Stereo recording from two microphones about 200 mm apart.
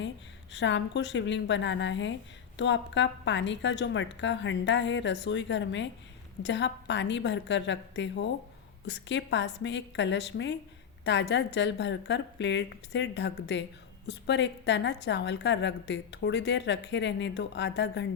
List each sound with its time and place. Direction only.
0.5 s a woman's voice: 65° left (ahead or behind)